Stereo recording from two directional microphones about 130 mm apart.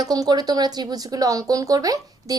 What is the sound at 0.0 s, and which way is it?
A woman's voice, 30° right (ahead or behind).